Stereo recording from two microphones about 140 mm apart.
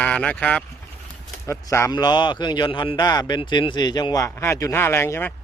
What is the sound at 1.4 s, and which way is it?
A man's voice, 20° left (ahead or behind).